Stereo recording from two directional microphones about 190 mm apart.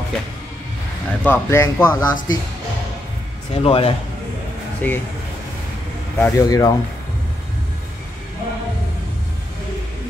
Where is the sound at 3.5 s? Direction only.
30° left (ahead or behind).